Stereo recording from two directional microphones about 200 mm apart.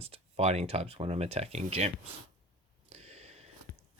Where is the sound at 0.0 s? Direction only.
30° right (ahead or behind).